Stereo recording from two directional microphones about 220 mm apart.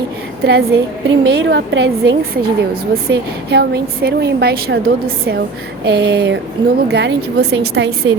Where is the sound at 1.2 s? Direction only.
50° right (ahead or behind).